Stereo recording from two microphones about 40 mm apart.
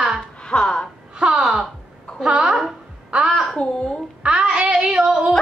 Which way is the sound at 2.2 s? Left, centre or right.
Centre.